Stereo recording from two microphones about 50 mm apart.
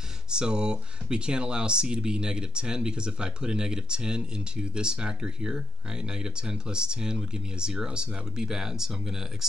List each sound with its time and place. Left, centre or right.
0.3 s speech: centre